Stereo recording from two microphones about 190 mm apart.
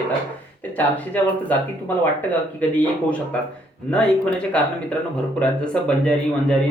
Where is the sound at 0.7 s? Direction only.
10° left (ahead or behind).